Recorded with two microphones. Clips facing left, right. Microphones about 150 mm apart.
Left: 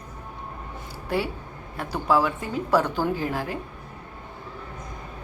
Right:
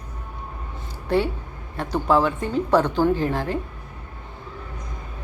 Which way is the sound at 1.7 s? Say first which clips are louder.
Right 3 dB; 5° left (ahead or behind).